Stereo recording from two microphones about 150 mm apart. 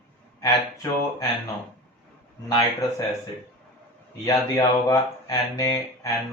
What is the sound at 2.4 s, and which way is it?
Speech, 25° left (ahead or behind).